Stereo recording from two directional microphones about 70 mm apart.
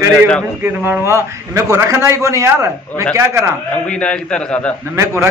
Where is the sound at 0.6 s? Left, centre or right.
Right.